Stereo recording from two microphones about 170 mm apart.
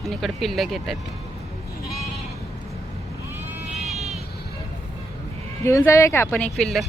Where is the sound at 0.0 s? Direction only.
Centre (ahead or behind).